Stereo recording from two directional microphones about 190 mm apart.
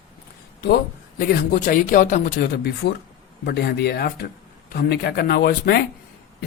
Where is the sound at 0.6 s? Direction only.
55° left (ahead or behind).